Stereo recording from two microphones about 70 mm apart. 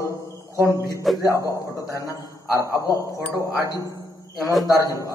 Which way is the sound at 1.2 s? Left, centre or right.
Left.